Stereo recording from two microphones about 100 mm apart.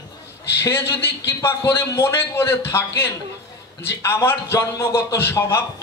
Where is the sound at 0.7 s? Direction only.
25° left (ahead or behind).